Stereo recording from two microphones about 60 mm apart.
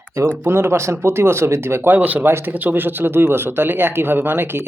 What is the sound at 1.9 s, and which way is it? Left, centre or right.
A man's voice, right.